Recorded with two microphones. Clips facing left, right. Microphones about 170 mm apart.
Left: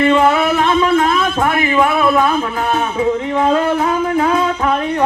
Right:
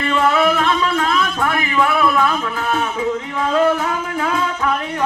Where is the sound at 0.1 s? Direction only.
25° left (ahead or behind).